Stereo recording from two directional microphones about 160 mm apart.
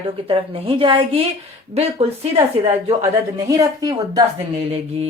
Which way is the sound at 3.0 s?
20° right (ahead or behind).